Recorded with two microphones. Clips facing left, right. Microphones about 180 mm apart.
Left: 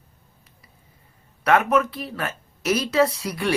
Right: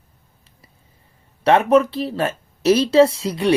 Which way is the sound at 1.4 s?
30° right (ahead or behind).